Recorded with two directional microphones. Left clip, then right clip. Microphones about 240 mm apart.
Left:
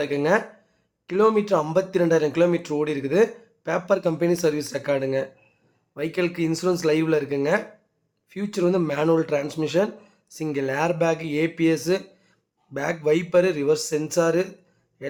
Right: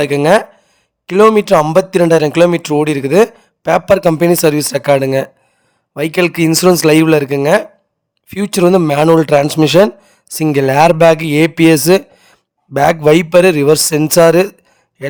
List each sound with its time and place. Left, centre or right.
0.0 s speech: right